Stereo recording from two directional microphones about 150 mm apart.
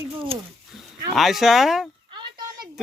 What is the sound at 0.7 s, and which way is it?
Speech, centre (ahead or behind).